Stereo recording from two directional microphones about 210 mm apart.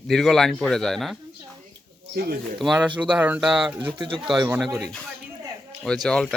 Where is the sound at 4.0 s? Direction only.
25° right (ahead or behind).